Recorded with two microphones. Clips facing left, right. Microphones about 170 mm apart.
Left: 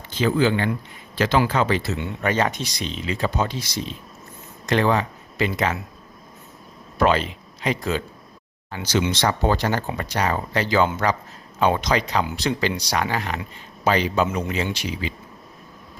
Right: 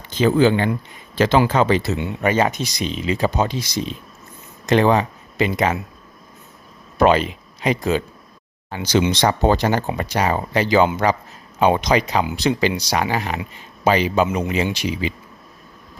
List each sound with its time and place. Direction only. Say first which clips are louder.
0.1 s speech: right 4 dB; 20° right (ahead or behind)
7.0 s speech: right 4 dB; 15° right (ahead or behind)